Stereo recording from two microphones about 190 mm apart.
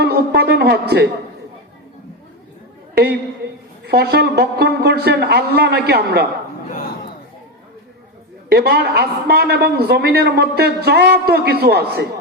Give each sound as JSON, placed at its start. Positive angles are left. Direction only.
{"t": 0.0, "sound": "a man's voice", "side_deg": -55}
{"t": 2.9, "sound": "a woman's voice", "side_deg": -60}
{"t": 8.4, "sound": "a man's voice", "side_deg": -60}